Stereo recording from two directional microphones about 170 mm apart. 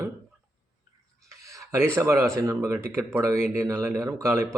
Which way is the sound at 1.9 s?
15° right (ahead or behind).